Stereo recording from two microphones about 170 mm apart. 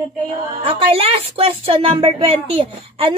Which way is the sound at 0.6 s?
35° right (ahead or behind).